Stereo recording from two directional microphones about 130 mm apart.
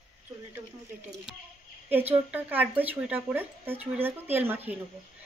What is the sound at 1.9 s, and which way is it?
Speech, 15° right (ahead or behind).